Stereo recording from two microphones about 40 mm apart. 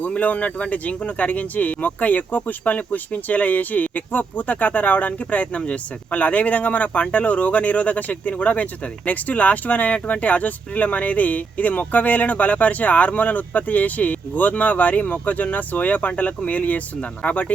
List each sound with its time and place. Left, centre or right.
0.2 s speech: left
5.5 s speech: left